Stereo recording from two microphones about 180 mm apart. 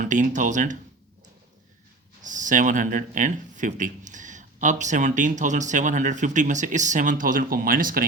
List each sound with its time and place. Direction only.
0.0 s speech: 45° right (ahead or behind)
2.2 s speech: 45° right (ahead or behind)